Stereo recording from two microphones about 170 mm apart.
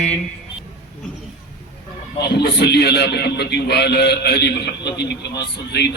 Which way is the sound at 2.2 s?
70° left (ahead or behind).